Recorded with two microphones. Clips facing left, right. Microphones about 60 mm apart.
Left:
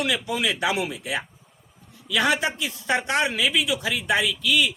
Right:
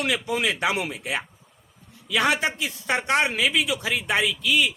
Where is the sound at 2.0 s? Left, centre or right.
Right.